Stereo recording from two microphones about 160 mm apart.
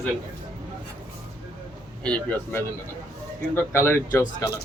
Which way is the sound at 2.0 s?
5° left (ahead or behind).